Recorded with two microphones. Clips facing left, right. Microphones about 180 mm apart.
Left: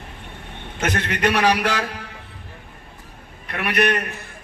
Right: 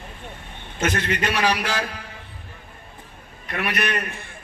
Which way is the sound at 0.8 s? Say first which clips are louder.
Left 1 dB; 60° left (ahead or behind).